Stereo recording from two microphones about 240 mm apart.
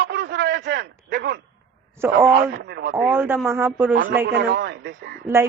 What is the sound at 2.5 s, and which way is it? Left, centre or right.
Speech, right.